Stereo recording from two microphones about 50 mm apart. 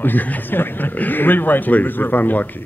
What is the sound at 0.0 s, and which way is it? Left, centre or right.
Speech, left.